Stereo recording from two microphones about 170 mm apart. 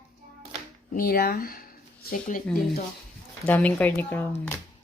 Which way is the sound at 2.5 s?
5° left (ahead or behind).